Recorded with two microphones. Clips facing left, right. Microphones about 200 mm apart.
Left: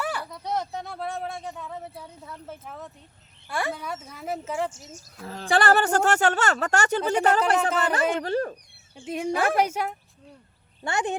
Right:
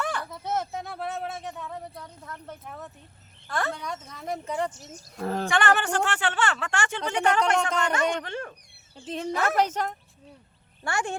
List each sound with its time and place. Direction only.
0.0 s a sound: 5° left (ahead or behind)
0.3 s speech: 5° right (ahead or behind)
5.2 s speech: 55° right (ahead or behind)
5.5 s speech: 35° left (ahead or behind)
9.0 s speech: 10° left (ahead or behind)
10.8 s speech: 20° left (ahead or behind)